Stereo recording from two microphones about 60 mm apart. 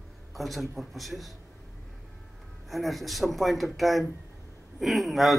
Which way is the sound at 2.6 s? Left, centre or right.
Centre.